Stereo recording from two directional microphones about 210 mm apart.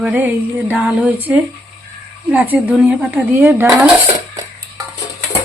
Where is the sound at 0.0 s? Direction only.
5° right (ahead or behind).